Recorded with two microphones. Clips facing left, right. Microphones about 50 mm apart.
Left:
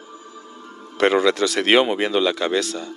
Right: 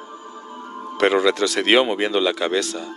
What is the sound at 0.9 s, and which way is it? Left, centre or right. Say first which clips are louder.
Speech: even; centre.